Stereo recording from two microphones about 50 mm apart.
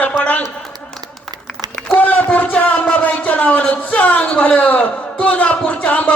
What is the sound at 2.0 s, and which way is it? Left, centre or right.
A man's voice, left.